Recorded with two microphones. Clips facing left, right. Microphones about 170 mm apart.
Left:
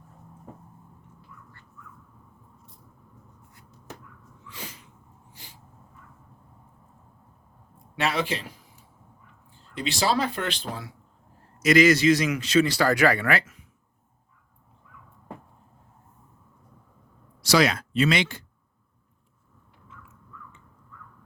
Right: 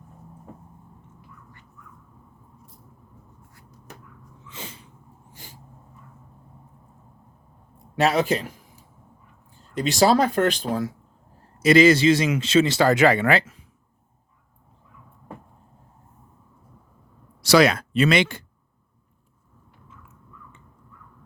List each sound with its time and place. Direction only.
4.4 s sneeze: 25° right (ahead or behind)
5.3 s gasp: 45° right (ahead or behind)
7.9 s speech: 40° right (ahead or behind)
9.6 s speech: 45° right (ahead or behind)
11.6 s a man's voice: 30° right (ahead or behind)
17.4 s speech: 60° right (ahead or behind)